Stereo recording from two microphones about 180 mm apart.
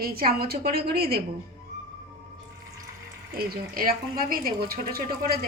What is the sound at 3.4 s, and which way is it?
Speech, 55° right (ahead or behind).